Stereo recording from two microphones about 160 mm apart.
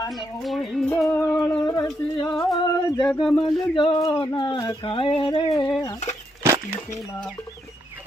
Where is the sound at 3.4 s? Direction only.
30° left (ahead or behind).